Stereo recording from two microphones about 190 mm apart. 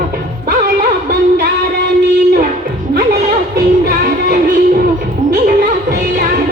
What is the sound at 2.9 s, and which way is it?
Music, 50° right (ahead or behind).